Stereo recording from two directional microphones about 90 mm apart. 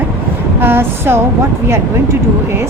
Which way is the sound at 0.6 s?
25° right (ahead or behind).